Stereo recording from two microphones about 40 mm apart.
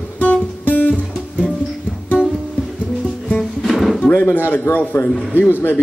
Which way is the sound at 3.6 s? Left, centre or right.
Centre.